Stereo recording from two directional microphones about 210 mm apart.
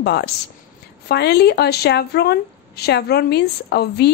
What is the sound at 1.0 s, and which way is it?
A woman's voice, 50° left (ahead or behind).